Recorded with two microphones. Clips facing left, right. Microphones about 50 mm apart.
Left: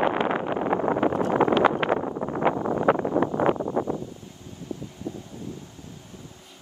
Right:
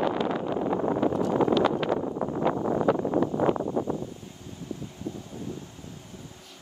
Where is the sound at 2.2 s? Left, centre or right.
Left.